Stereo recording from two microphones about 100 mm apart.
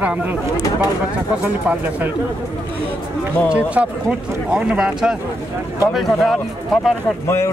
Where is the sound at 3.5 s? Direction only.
10° right (ahead or behind).